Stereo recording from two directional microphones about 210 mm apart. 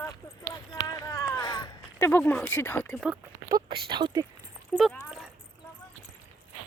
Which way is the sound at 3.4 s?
20° right (ahead or behind).